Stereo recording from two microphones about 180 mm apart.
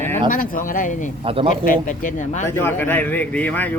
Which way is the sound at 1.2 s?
30° right (ahead or behind).